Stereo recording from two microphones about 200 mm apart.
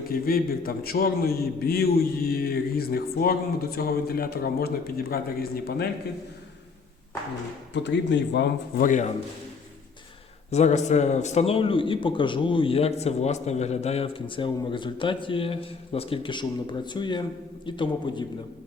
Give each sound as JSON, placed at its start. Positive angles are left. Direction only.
{"t": 0.1, "sound": "a man's voice", "side_deg": 45}
{"t": 7.7, "sound": "speech", "side_deg": 60}
{"t": 8.8, "sound": "a man's voice", "side_deg": 40}
{"t": 10.5, "sound": "a man's voice", "side_deg": 35}